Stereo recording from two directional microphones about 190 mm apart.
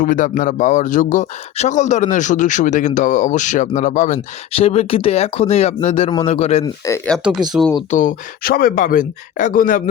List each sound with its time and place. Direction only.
0.0 s speech: 45° left (ahead or behind)
6.8 s speech: 15° left (ahead or behind)
7.1 s speech: centre (ahead or behind)
7.9 s speech: 45° left (ahead or behind)